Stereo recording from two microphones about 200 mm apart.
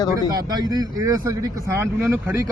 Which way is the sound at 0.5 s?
20° right (ahead or behind).